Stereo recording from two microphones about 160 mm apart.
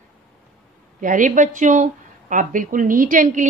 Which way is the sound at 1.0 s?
55° right (ahead or behind).